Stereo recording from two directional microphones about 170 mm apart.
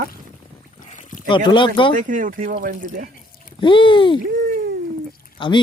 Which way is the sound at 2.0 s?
50° right (ahead or behind).